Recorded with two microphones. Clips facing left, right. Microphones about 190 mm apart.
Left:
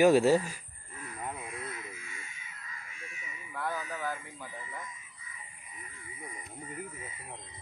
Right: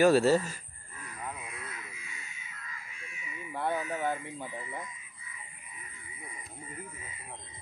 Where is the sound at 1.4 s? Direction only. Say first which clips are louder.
Left 4 dB; 50° left (ahead or behind).